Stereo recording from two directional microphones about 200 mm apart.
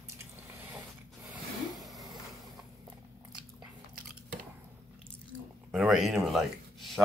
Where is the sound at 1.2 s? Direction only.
Centre (ahead or behind).